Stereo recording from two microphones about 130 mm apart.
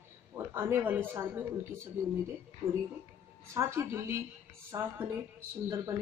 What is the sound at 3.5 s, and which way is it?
Speech, 20° right (ahead or behind).